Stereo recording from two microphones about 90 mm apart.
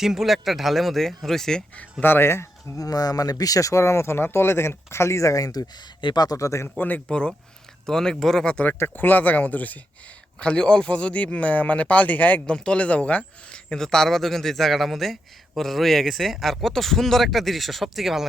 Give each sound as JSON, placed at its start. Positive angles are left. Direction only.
{"t": 0.0, "sound": "speech", "side_deg": -5}
{"t": 2.8, "sound": "speech", "side_deg": 45}
{"t": 6.7, "sound": "speech", "side_deg": 20}